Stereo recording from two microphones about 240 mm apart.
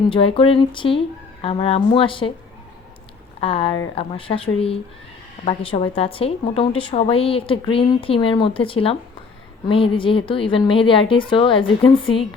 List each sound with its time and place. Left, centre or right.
0.1 s a woman's voice: left
3.4 s a woman's voice: left